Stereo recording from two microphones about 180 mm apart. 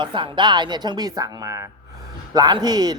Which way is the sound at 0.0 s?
25° right (ahead or behind).